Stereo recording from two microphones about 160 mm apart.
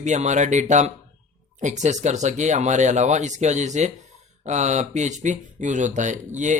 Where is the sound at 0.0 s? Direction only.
45° right (ahead or behind).